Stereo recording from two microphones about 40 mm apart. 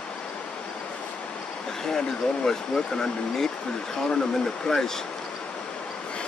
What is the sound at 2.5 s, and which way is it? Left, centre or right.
Speech, centre.